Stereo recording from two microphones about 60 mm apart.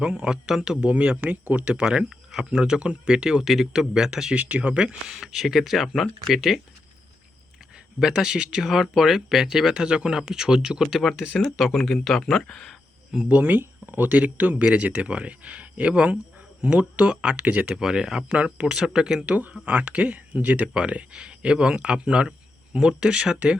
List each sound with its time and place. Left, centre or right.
0.0 s speech: centre
0.8 s speech: right
3.4 s speech: centre
4.4 s speech: right
5.0 s speech: centre
7.9 s speech: centre
13.2 s speech: right
17.7 s speech: centre
18.3 s speech: right
19.2 s speech: right